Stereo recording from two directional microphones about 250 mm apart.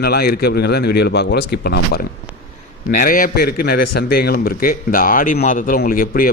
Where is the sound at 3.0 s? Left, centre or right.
Left.